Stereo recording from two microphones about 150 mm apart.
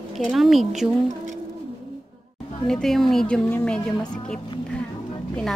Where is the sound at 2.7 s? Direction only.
5° left (ahead or behind).